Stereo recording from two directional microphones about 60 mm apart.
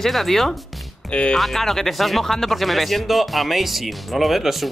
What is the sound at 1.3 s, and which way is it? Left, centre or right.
Speech, centre.